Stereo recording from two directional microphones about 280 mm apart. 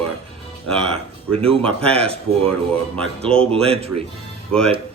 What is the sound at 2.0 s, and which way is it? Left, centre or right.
Speech, right.